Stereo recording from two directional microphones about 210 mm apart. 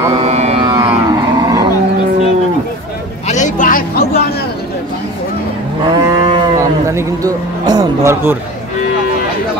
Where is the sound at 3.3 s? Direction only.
35° left (ahead or behind).